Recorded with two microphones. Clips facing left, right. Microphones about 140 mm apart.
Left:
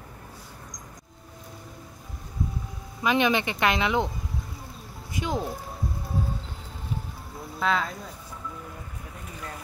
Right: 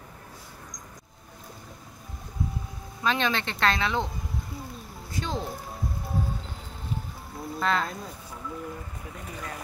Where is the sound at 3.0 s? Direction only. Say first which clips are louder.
Left 4 dB; 15° left (ahead or behind).